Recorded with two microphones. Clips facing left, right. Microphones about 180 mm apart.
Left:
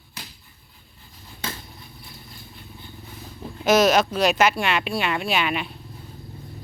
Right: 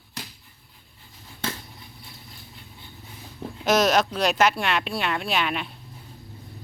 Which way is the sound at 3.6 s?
Centre (ahead or behind).